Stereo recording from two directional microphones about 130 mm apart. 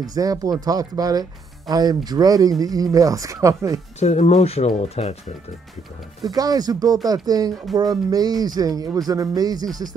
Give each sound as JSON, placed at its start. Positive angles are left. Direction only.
{"t": 0.0, "sound": "speech", "side_deg": -30}
{"t": 4.0, "sound": "speech", "side_deg": 60}
{"t": 6.2, "sound": "speech", "side_deg": -30}